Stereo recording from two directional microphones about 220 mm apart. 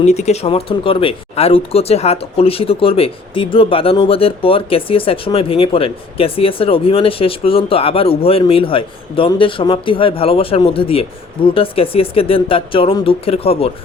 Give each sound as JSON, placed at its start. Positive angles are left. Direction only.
{"t": 0.0, "sound": "speech", "side_deg": 30}